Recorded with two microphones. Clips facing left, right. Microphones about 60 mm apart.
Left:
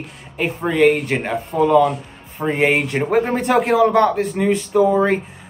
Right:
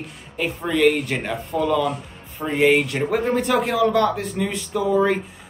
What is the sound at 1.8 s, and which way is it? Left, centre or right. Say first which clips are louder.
Music: left 6 dB; centre.